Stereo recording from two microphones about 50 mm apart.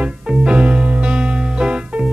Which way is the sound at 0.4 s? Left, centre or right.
Right.